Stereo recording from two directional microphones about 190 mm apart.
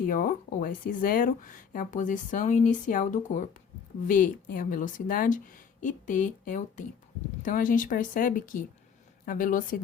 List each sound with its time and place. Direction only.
0.0 s speech: 45° left (ahead or behind)